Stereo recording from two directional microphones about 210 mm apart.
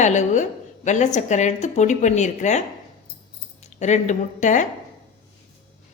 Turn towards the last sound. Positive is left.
turn(degrees=35)  # may be behind; listen again after turning